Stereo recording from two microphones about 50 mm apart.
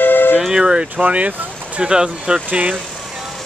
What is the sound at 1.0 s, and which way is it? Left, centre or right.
Speech, right.